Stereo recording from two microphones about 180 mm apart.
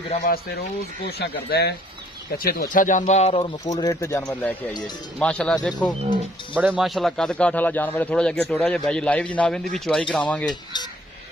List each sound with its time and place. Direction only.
0.2 s speech: 60° left (ahead or behind)
2.3 s a man's voice: 50° left (ahead or behind); by 10.2 s 5° left (ahead or behind)
10.4 s speech: 25° left (ahead or behind)